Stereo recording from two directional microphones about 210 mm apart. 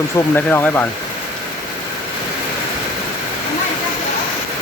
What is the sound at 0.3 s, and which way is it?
Speech, 10° left (ahead or behind).